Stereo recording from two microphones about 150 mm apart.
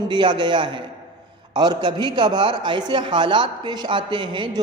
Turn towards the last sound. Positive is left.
turn(degrees=-30)  # may be behind; listen again after turning